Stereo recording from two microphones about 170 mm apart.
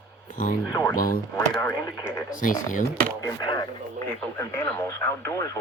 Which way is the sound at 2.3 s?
50° left (ahead or behind).